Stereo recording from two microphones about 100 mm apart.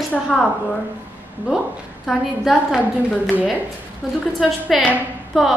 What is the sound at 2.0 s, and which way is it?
Speech, centre (ahead or behind).